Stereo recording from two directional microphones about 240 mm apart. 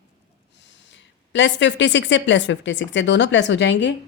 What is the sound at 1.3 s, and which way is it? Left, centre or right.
A woman's voice, left.